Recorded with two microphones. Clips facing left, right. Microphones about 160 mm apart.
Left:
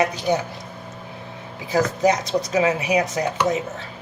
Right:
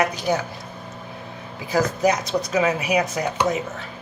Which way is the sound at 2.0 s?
25° left (ahead or behind).